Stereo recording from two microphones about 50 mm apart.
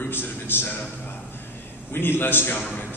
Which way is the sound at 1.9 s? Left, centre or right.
Left.